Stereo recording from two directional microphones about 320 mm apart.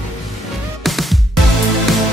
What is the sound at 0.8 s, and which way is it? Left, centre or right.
Music, centre.